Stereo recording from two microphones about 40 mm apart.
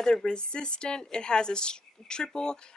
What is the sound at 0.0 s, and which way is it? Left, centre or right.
Speech, centre.